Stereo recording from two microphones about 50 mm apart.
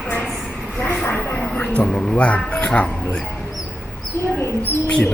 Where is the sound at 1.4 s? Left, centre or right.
Centre.